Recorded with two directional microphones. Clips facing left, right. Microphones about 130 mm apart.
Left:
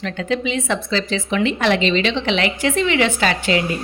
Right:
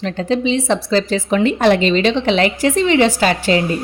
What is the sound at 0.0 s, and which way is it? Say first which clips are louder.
Speech: right 4 dB; 35° right (ahead or behind).